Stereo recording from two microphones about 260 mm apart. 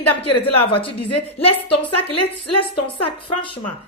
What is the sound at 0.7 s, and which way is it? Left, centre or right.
A man's voice, left.